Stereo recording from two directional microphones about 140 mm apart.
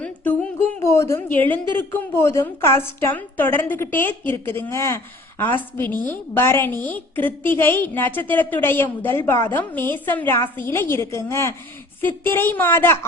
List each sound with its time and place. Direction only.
0.8 s a woman's voice: 20° left (ahead or behind)